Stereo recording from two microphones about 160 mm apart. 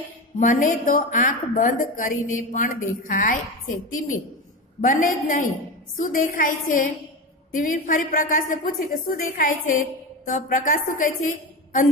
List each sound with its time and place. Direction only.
0.4 s a woman's voice: 55° left (ahead or behind)
4.8 s a woman's voice: 55° left (ahead or behind)